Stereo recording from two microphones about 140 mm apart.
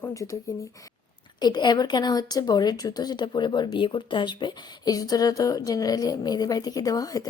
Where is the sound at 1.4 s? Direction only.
30° left (ahead or behind).